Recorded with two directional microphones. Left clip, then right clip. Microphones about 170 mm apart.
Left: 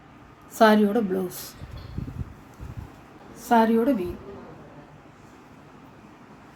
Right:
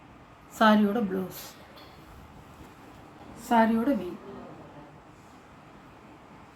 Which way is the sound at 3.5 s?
50° left (ahead or behind).